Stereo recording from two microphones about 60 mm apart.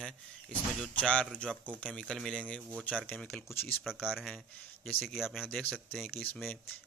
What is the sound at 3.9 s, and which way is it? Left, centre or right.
Speech, centre.